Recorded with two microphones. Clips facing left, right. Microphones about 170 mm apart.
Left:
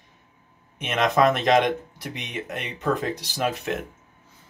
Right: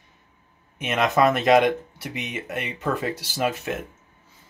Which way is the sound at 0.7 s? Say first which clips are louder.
Even; 5° right (ahead or behind).